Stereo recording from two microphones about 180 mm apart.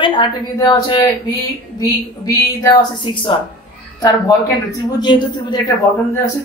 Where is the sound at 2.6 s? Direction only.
25° left (ahead or behind).